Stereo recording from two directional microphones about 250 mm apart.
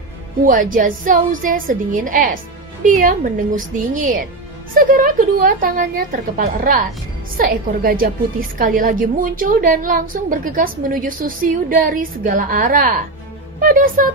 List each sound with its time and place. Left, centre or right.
0.5 s a woman's voice: right